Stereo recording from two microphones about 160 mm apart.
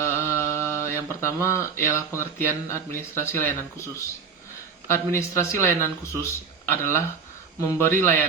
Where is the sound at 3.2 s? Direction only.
15° left (ahead or behind).